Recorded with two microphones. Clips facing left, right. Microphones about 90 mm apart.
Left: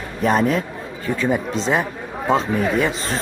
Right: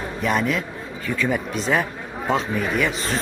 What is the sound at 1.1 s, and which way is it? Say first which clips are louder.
Speech: left 3 dB; 25° left (ahead or behind).